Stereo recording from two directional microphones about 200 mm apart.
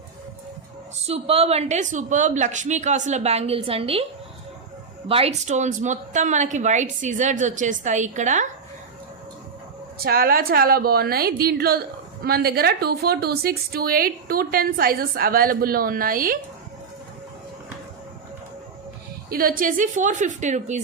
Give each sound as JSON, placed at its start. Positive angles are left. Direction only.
{"t": 1.0, "sound": "a woman's voice", "side_deg": -30}
{"t": 5.0, "sound": "a woman's voice", "side_deg": -30}
{"t": 10.0, "sound": "a woman's voice", "side_deg": -50}
{"t": 19.3, "sound": "a woman's voice", "side_deg": -45}